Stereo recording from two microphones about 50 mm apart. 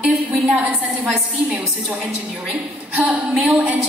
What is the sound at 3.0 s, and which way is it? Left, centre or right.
Speech, centre.